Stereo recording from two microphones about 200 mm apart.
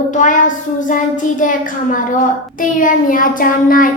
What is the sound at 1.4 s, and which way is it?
Speech, 40° left (ahead or behind).